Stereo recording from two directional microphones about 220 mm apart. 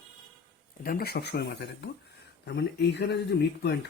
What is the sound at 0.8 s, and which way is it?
Speech, 45° left (ahead or behind).